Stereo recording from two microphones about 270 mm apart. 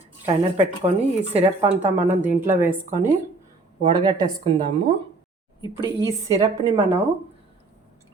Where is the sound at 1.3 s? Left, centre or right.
Right.